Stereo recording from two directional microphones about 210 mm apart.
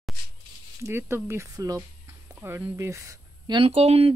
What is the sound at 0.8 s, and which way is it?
Speech, 15° right (ahead or behind).